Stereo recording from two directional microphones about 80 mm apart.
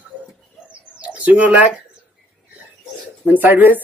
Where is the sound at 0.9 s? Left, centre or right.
Centre.